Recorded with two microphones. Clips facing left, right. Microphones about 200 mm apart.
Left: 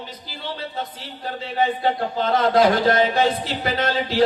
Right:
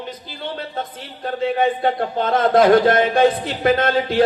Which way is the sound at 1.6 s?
50° right (ahead or behind).